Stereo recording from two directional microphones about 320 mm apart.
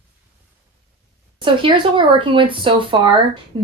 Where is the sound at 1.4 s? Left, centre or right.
Centre.